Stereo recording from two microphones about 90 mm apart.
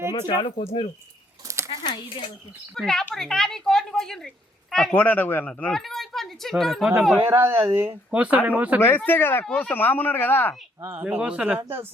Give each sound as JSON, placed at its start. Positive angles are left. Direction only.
{"t": 0.3, "sound": "speech", "side_deg": 80}
{"t": 1.5, "sound": "a sound", "side_deg": -30}
{"t": 1.8, "sound": "speech", "side_deg": 65}
{"t": 2.7, "sound": "speech", "side_deg": 5}
{"t": 4.9, "sound": "speech", "side_deg": 20}
{"t": 5.7, "sound": "speech", "side_deg": 5}
{"t": 7.2, "sound": "speech", "side_deg": -25}
{"t": 8.1, "sound": "speech", "side_deg": -15}
{"t": 9.0, "sound": "speech", "side_deg": 25}
{"t": 10.8, "sound": "speech", "side_deg": -25}
{"t": 11.2, "sound": "speech", "side_deg": -15}